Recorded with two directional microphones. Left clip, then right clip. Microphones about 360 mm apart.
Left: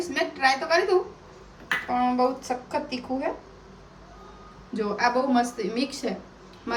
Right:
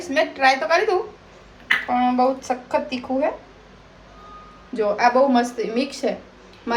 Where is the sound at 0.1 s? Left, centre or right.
Centre.